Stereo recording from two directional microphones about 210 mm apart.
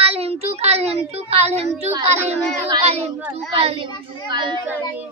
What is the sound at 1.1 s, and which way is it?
Speech, 30° right (ahead or behind).